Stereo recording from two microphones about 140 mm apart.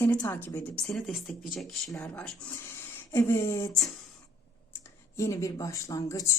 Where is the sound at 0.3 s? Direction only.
10° left (ahead or behind).